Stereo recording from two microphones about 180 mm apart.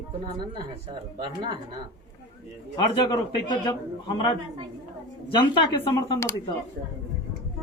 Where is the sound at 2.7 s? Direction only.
25° left (ahead or behind).